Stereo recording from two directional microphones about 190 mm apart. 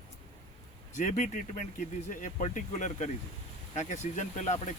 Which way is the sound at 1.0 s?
40° left (ahead or behind).